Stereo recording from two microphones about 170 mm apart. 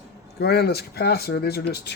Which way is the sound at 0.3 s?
70° left (ahead or behind).